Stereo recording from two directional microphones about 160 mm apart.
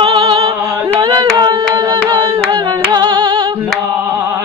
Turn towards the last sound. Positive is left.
turn(degrees=-30)  # may be behind; listen again after turning